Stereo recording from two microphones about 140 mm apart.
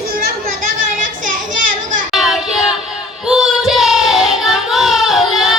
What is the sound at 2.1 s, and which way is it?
Child singing, centre (ahead or behind).